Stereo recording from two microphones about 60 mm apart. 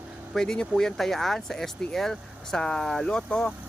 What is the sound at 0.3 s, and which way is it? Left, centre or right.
Speech, centre.